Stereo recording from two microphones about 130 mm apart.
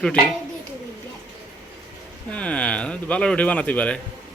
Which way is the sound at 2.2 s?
10° left (ahead or behind).